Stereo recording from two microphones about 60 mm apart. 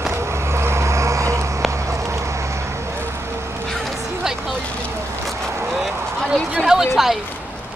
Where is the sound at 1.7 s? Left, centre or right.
Right.